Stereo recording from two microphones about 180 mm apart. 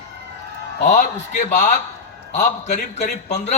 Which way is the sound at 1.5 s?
40° left (ahead or behind).